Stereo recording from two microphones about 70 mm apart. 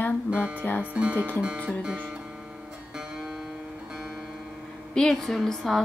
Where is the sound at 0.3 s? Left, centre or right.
Centre.